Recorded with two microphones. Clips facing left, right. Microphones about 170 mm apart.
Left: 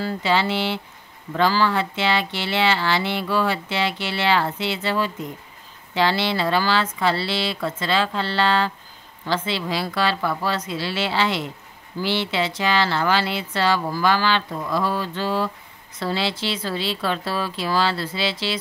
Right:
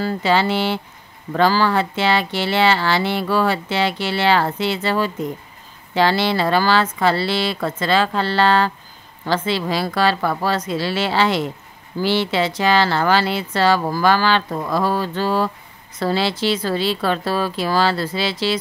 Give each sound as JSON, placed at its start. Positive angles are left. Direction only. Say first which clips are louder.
{"t": 0.0, "sound": "speech", "louder": "right 4 dB", "side_deg": -45}